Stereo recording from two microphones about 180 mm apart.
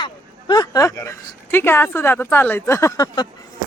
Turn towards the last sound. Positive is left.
turn(degrees=20)  # may be behind; listen again after turning